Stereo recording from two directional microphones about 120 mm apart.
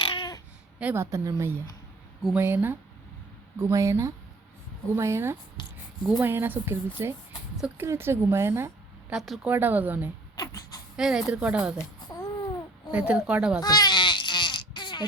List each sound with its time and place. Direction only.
0.0 s baby cry: 40° left (ahead or behind)
0.9 s a woman's voice: 25° right (ahead or behind)
9.1 s speech: 5° right (ahead or behind)
9.5 s speech: 15° right (ahead or behind)
10.3 s a sound: 35° left (ahead or behind)
10.9 s speech: 5° right (ahead or behind)
11.9 s babbling: 35° left (ahead or behind)
12.9 s speech: 10° right (ahead or behind)
13.6 s bleat: 35° left (ahead or behind)